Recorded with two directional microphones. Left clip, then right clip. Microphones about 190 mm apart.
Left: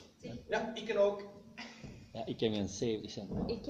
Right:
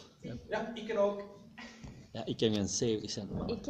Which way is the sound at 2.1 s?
50° right (ahead or behind).